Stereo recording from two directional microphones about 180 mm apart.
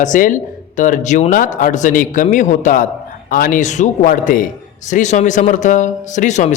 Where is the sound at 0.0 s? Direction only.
45° left (ahead or behind).